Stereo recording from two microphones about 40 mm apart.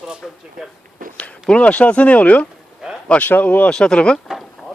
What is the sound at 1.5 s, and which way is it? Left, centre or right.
Speech, left.